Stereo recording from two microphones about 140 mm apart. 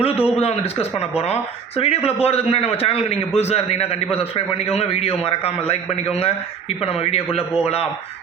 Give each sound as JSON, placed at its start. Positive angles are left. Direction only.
{"t": 0.0, "sound": "a man's voice", "side_deg": 45}